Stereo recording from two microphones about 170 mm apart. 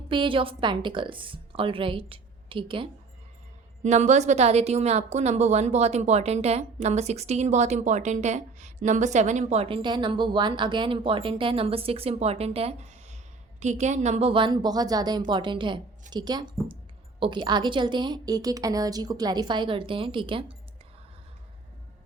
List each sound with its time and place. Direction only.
0.1 s a woman's voice: 30° right (ahead or behind)
3.8 s a woman's voice: 45° right (ahead or behind)